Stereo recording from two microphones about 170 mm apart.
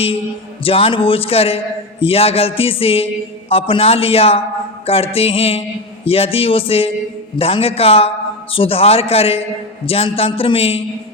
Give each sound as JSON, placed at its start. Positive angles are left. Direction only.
{"t": 0.6, "sound": "a man's voice", "side_deg": 35}